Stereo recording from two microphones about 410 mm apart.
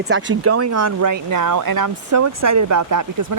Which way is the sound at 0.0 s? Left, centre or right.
Right.